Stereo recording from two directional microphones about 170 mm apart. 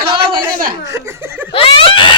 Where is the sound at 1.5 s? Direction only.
30° left (ahead or behind).